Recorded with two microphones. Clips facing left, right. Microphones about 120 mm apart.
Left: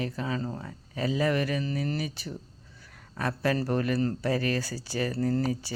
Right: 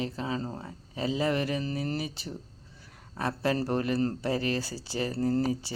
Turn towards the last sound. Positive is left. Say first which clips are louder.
# even
turn(degrees=-25)  # may be behind; listen again after turning